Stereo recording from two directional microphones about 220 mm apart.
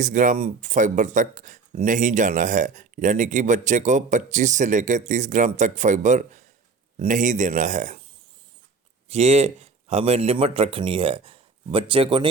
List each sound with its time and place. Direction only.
0.0 s speech: 35° right (ahead or behind)
9.0 s a man's voice: 30° right (ahead or behind)